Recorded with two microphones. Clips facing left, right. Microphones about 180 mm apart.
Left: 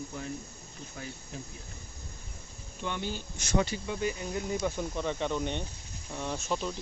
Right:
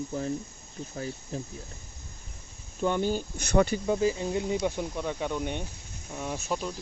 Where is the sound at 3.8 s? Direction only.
30° right (ahead or behind); by 6.7 s 5° right (ahead or behind).